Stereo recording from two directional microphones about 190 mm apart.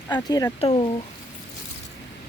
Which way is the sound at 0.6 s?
30° left (ahead or behind).